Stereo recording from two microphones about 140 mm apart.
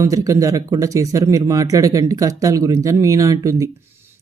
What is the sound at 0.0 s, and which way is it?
Speech, 25° right (ahead or behind).